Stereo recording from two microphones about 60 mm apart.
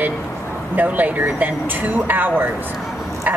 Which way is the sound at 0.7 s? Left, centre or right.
Right.